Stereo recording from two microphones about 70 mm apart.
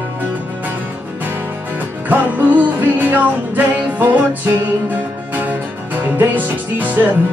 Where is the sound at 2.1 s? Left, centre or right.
Right.